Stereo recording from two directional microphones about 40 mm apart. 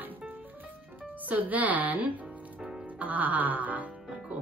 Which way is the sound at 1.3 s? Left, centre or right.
Right.